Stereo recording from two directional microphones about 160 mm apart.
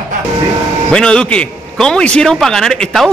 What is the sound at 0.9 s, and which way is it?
A man's voice, 5° left (ahead or behind).